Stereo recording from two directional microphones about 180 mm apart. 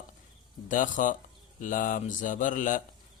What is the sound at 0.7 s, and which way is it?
Speech, 45° left (ahead or behind).